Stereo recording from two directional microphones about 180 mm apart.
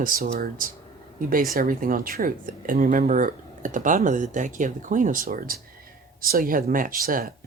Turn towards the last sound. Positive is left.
turn(degrees=-55)  # may be behind; listen again after turning